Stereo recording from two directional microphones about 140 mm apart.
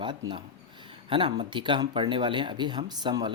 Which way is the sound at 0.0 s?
35° right (ahead or behind).